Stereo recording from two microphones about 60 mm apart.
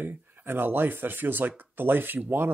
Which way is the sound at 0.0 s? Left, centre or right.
Right.